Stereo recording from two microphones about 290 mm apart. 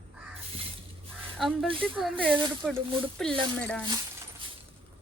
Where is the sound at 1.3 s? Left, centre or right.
Centre.